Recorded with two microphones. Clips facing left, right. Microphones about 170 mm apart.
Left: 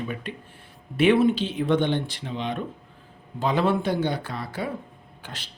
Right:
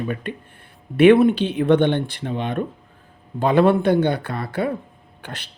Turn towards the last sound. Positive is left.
turn(degrees=-60)  # may be behind; listen again after turning